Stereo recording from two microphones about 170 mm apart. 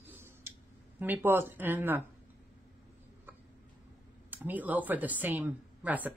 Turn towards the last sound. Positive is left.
turn(degrees=-10)  # may be behind; listen again after turning